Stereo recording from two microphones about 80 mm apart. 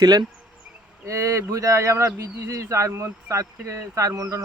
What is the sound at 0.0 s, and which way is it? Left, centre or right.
Speech, right.